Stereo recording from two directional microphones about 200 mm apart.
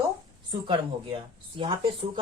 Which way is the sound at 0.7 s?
25° right (ahead or behind).